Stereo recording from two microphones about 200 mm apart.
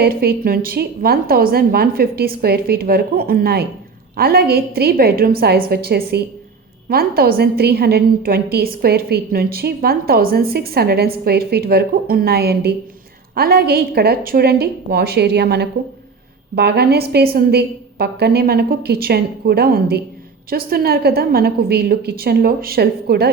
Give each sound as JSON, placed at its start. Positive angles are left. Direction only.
{"t": 0.0, "sound": "a woman's voice", "side_deg": -50}